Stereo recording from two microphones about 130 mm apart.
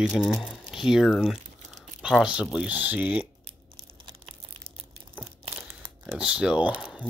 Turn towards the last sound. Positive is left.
turn(degrees=-10)  # may be behind; listen again after turning